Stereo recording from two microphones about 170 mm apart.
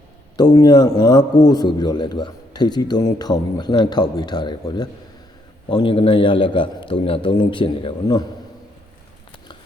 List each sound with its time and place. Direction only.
0.3 s a man's voice: 25° left (ahead or behind)